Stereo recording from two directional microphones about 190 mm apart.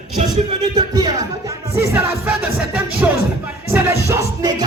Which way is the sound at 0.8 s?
20° right (ahead or behind).